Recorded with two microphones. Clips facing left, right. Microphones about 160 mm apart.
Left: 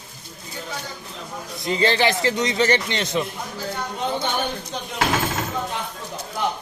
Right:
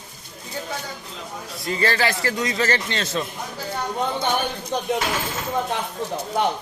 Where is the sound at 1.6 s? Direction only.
20° left (ahead or behind).